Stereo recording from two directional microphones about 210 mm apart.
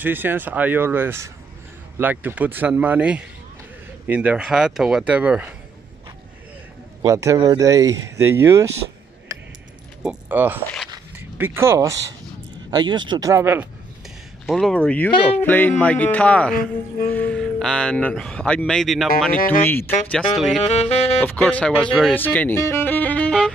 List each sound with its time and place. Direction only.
0.0 s speech: 10° right (ahead or behind)
7.0 s speech: 15° right (ahead or behind)
10.0 s speech: 10° right (ahead or behind)
10.9 s a sound: 10° right (ahead or behind)
12.7 s speech: 20° right (ahead or behind)
14.5 s speech: centre (ahead or behind)
19.3 s speech: 40° left (ahead or behind)
19.6 s speech: 10° left (ahead or behind)
20.6 s saxophone: 30° left (ahead or behind)
21.2 s speech: 5° left (ahead or behind)